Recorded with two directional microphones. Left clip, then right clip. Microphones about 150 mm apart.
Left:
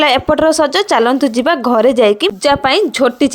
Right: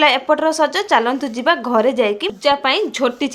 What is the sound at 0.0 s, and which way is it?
A woman's voice, 45° left (ahead or behind).